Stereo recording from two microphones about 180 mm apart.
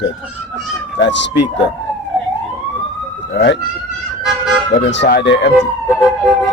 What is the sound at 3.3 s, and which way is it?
Speech, 75° left (ahead or behind).